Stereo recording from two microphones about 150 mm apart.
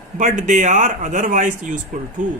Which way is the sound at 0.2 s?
60° right (ahead or behind).